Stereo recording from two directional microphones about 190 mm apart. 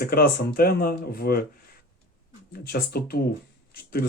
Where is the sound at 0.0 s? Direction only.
55° left (ahead or behind).